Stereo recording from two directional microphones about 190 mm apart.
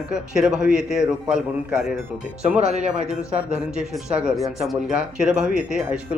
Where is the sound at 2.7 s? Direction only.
35° right (ahead or behind).